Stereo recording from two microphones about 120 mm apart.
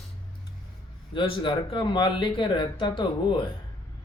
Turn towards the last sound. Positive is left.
turn(degrees=45)  # may be behind; listen again after turning